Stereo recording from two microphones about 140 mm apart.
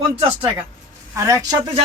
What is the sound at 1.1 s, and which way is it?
Speech, 25° right (ahead or behind).